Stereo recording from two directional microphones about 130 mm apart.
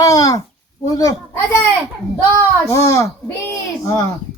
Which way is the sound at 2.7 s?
20° left (ahead or behind).